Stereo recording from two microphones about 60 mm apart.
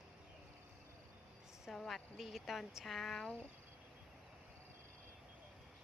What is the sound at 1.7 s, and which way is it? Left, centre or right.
Speech, centre.